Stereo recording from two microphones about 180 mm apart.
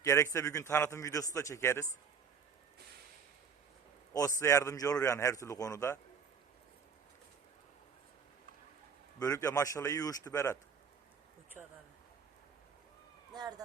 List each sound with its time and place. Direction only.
0.0 s a man's voice: 15° left (ahead or behind)
4.4 s a man's voice: 15° left (ahead or behind)
9.1 s a man's voice: 20° left (ahead or behind)
11.6 s speech: 10° right (ahead or behind)
13.3 s speech: 20° right (ahead or behind)